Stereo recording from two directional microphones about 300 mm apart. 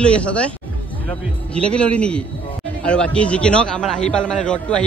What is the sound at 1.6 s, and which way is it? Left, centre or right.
A man's voice, centre.